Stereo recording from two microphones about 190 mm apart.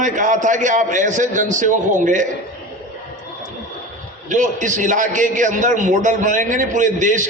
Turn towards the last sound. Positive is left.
turn(degrees=-40)  # may be behind; listen again after turning